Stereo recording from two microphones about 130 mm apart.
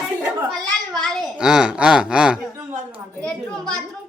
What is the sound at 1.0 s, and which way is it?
A child's voice, centre (ahead or behind).